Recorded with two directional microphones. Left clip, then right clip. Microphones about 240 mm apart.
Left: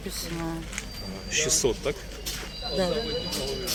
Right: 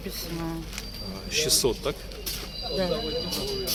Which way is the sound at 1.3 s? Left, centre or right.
Centre.